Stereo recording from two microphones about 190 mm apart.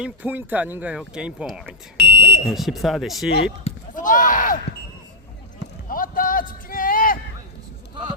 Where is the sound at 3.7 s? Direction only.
45° left (ahead or behind).